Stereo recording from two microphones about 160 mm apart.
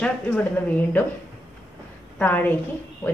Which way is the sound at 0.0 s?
5° left (ahead or behind).